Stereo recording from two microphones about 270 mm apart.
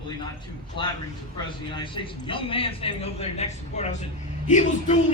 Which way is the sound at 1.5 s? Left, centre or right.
Centre.